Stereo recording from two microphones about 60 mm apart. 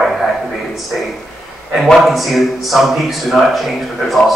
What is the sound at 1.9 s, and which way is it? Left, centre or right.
A man's voice, centre.